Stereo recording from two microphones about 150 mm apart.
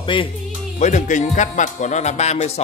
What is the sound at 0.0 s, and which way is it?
Speech, 35° left (ahead or behind).